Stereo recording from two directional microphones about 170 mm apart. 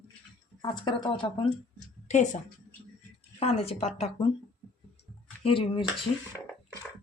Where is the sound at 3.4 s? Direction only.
35° left (ahead or behind).